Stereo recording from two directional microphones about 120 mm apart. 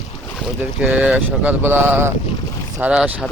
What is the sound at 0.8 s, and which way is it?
Speech, 5° right (ahead or behind).